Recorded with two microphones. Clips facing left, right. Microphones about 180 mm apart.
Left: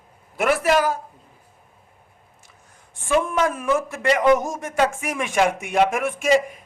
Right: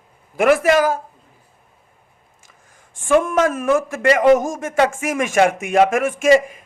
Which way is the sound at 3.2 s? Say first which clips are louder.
Right 4 dB; 90° right.